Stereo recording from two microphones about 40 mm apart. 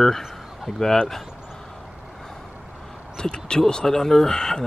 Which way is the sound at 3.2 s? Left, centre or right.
Centre.